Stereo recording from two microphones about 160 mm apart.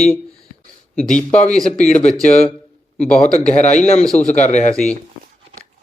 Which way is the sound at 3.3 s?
45° left (ahead or behind).